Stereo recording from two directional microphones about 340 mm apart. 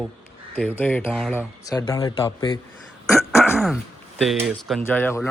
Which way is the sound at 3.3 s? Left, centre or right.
Centre.